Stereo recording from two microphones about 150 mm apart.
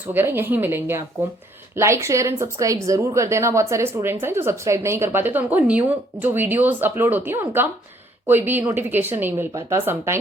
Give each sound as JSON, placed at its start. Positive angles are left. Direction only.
{"t": 0.1, "sound": "speech", "side_deg": -15}